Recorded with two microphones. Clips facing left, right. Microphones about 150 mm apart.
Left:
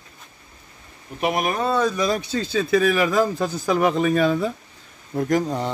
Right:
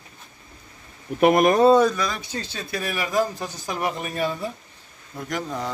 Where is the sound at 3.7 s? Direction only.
90° left.